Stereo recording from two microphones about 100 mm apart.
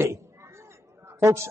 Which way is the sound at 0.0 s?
25° right (ahead or behind).